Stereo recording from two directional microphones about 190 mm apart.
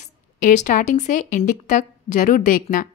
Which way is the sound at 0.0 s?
40° left (ahead or behind).